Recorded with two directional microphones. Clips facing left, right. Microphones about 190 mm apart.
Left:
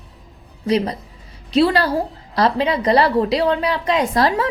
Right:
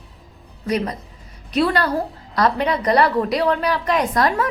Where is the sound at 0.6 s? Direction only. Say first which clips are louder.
Left 3 dB; 30° left (ahead or behind).